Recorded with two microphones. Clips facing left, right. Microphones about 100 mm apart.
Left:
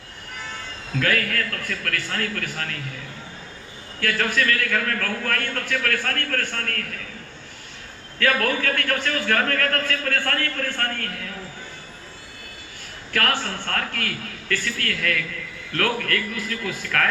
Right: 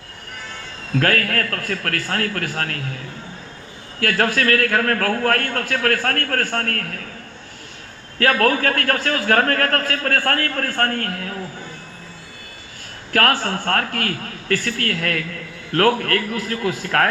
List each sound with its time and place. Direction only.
0.9 s speech: 50° right (ahead or behind)
4.0 s speech: 50° right (ahead or behind)
8.2 s speech: 45° right (ahead or behind)
13.1 s speech: 45° right (ahead or behind)